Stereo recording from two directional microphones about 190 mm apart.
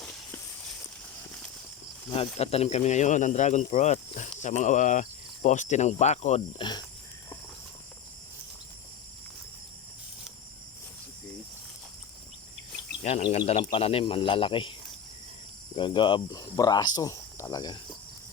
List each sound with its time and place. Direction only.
2.0 s speech: 30° left (ahead or behind)
6.6 s speech: 20° left (ahead or behind)
13.3 s speech: 30° left (ahead or behind)
15.7 s speech: 25° left (ahead or behind)